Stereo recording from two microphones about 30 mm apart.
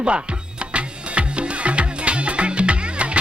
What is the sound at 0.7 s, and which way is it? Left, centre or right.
Music, right.